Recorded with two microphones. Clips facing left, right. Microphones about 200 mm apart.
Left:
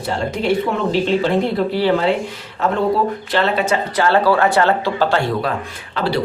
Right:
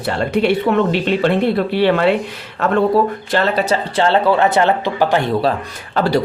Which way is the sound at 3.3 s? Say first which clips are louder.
Even; 40° right (ahead or behind).